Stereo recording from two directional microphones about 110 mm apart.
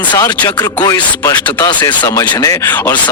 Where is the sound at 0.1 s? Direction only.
40° left (ahead or behind).